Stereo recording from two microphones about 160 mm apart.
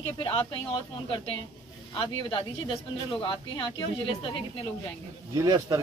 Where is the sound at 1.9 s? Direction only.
35° left (ahead or behind).